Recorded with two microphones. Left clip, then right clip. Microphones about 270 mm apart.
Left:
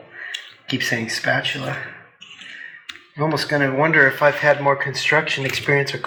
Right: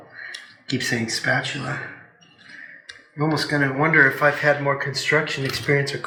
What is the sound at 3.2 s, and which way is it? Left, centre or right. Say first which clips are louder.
Speech: left 2 dB; left.